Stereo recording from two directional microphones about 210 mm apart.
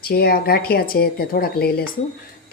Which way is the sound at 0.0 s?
45° left (ahead or behind).